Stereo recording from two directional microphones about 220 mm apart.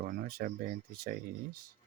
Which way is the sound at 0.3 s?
40° right (ahead or behind).